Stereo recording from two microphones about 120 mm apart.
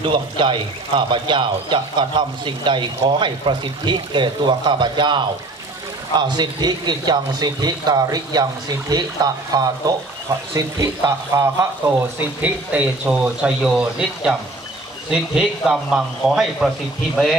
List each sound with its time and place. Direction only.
0.0 s speech: 45° right (ahead or behind); by 12.1 s 25° right (ahead or behind)
12.4 s speech: 10° right (ahead or behind)